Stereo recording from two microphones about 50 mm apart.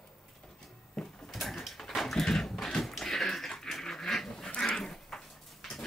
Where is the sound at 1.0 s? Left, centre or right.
Centre.